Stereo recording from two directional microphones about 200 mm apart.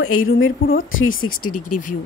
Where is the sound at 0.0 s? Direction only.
90° left.